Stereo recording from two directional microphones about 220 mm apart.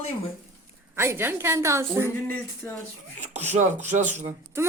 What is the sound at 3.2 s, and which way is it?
Speech, 30° right (ahead or behind).